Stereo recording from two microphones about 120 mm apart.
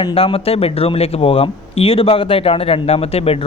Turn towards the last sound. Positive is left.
turn(degrees=55)  # may be behind; listen again after turning